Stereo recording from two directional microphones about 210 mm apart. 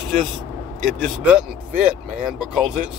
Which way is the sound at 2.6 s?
35° right (ahead or behind).